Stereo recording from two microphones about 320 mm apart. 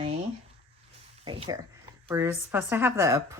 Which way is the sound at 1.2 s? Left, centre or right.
Centre.